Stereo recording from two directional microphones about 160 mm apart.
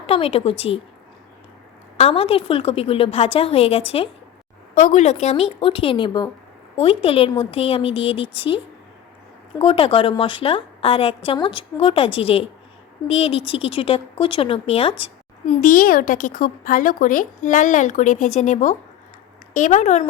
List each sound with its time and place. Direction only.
0.1 s speech: 40° left (ahead or behind)
2.0 s speech: 40° left (ahead or behind)
4.7 s speech: 55° left (ahead or behind); by 15.5 s 35° left (ahead or behind)
15.6 s a woman's voice: 60° left (ahead or behind)